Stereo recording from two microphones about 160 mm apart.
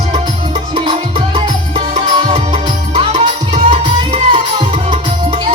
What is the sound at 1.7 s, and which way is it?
Music, 35° right (ahead or behind).